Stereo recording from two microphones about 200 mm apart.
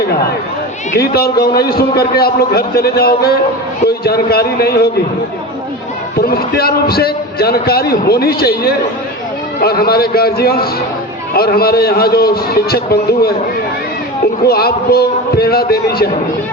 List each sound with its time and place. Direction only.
0.9 s a man's voice: 50° left (ahead or behind)
6.2 s a man's voice: 50° left (ahead or behind)
14.4 s a man's voice: 50° left (ahead or behind)